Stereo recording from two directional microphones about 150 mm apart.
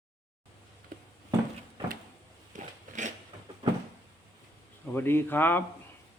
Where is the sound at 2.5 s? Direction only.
55° right (ahead or behind).